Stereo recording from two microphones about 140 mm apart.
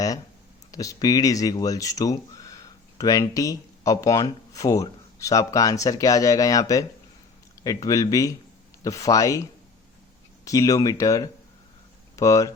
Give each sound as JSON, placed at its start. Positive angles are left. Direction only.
{"t": 0.7, "sound": "speech", "side_deg": 25}